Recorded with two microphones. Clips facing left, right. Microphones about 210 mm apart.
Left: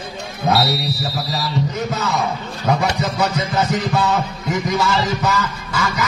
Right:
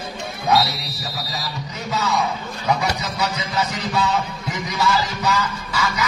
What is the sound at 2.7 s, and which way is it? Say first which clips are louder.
Music: left 4 dB; 50° left (ahead or behind).